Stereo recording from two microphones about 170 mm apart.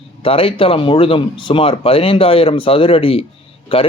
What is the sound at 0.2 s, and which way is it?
Speech, 35° left (ahead or behind).